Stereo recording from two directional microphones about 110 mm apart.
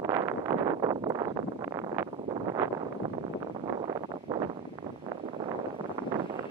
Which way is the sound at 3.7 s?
40° right (ahead or behind).